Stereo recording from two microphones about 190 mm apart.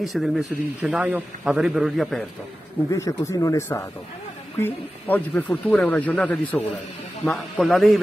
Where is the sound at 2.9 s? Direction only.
15° left (ahead or behind).